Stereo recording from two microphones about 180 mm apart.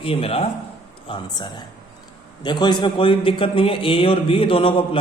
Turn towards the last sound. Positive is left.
turn(degrees=30)  # may be behind; listen again after turning